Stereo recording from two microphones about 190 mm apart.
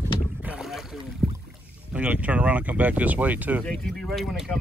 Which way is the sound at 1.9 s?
5° right (ahead or behind).